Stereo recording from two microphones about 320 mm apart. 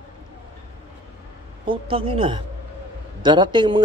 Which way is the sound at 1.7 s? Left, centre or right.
Centre.